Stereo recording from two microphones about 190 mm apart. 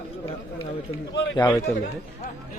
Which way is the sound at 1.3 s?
20° left (ahead or behind).